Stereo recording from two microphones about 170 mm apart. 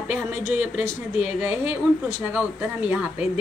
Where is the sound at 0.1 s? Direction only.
10° right (ahead or behind).